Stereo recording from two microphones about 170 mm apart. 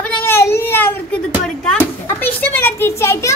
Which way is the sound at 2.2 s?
10° left (ahead or behind).